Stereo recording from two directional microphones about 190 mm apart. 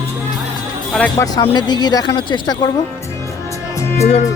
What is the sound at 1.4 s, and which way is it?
A woman's voice, 25° left (ahead or behind).